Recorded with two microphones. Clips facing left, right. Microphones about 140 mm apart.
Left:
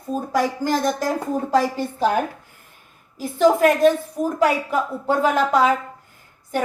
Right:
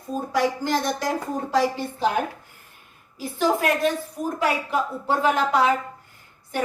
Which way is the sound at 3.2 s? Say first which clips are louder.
Left 7 dB; 45° left (ahead or behind).